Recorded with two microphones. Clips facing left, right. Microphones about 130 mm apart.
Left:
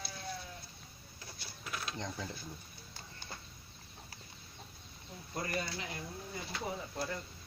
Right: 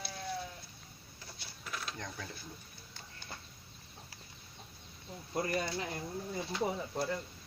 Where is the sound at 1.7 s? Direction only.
15° left (ahead or behind).